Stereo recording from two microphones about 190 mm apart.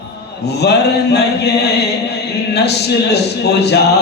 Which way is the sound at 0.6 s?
60° left (ahead or behind).